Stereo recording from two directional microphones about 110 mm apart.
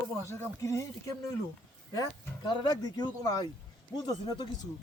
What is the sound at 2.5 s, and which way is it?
A man's voice, 40° left (ahead or behind).